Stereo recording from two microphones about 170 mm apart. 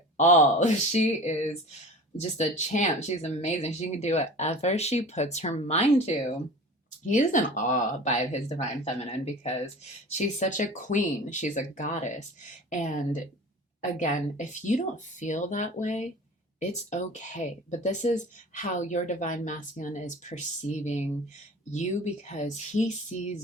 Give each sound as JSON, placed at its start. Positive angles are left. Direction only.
{"t": 0.2, "sound": "speech", "side_deg": 45}
{"t": 7.0, "sound": "speech", "side_deg": 45}